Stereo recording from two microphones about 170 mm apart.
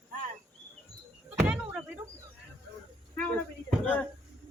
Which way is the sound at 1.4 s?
10° right (ahead or behind).